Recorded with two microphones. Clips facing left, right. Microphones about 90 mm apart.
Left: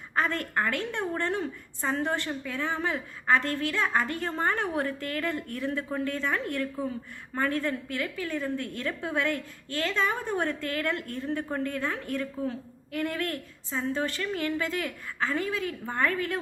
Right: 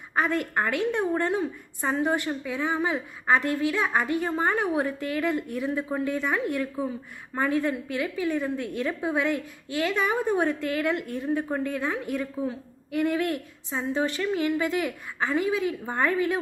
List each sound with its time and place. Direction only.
0.2 s a woman's voice: 15° right (ahead or behind)